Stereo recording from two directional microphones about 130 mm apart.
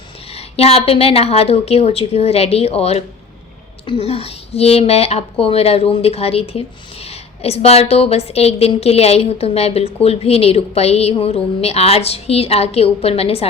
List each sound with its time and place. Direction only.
0.3 s a woman's voice: 50° left (ahead or behind)